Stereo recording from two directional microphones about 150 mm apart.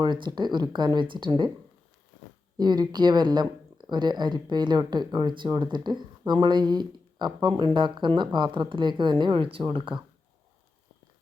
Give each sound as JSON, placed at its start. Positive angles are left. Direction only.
{"t": 0.0, "sound": "speech", "side_deg": -30}
{"t": 2.6, "sound": "speech", "side_deg": -30}